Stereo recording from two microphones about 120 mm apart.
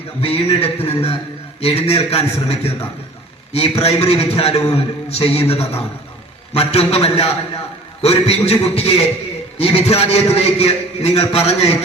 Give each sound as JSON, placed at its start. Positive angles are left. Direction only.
{"t": 0.2, "sound": "a man's voice", "side_deg": 55}